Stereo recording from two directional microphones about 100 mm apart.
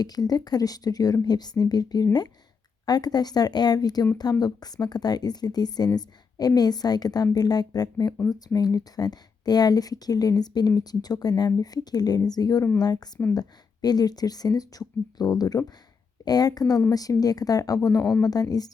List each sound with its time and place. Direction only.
0.0 s speech: 40° left (ahead or behind)